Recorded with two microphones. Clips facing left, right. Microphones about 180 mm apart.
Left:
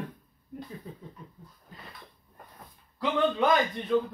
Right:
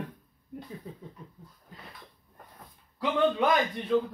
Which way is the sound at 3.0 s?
10° right (ahead or behind).